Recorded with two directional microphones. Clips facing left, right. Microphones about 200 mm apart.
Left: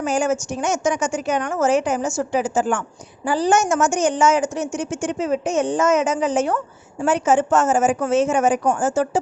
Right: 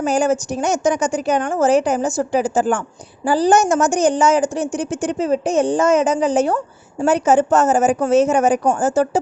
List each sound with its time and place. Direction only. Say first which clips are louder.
0.0 s a woman's voice: right 3 dB; 35° right (ahead or behind)